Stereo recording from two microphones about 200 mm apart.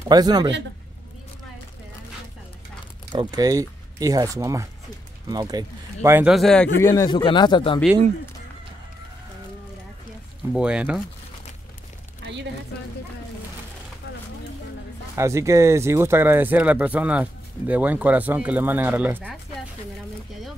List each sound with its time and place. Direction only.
0.1 s a man's voice: 20° right (ahead or behind)
3.1 s speech: 20° right (ahead or behind); by 6.7 s 5° left (ahead or behind)
6.8 s speech: 15° left (ahead or behind)
10.5 s speech: 5° right (ahead or behind)
12.2 s a sound: 60° right (ahead or behind)
15.1 s speech: 15° right (ahead or behind)